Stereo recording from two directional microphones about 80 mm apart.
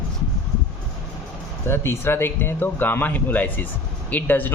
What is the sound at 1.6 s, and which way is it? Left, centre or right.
Speech, left.